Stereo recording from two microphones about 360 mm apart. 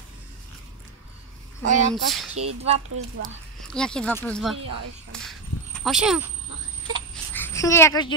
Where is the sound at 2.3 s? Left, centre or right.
Centre.